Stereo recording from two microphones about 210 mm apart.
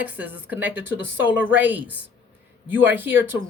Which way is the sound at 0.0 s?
10° right (ahead or behind).